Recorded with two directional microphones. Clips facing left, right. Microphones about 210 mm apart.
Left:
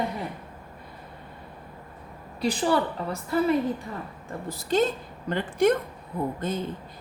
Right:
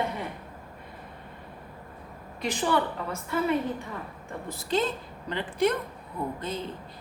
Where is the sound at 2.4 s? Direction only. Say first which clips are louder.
Left 3 dB; 35° left (ahead or behind).